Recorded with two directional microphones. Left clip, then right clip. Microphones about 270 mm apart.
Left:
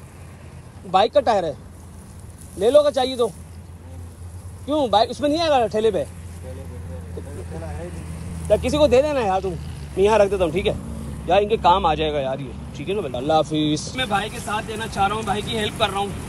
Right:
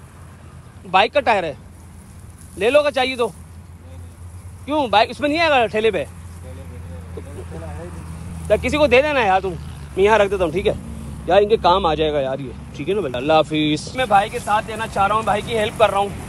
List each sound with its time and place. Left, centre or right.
0.9 s speech: right
2.6 s speech: right
4.7 s speech: right
8.5 s speech: centre
13.9 s speech: centre